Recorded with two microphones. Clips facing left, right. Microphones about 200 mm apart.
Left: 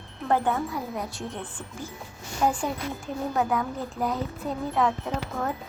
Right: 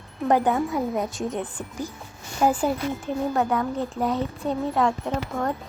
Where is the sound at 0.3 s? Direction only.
15° right (ahead or behind).